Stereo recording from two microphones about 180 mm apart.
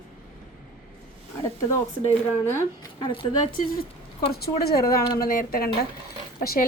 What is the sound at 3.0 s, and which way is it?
Speech, 30° left (ahead or behind).